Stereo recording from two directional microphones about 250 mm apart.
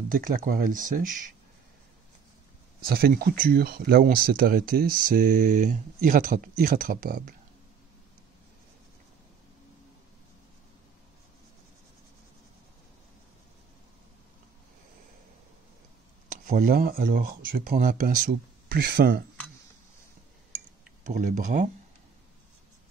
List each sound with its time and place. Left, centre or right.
0.1 s speech: right
2.8 s speech: right
16.4 s speech: right
21.0 s speech: right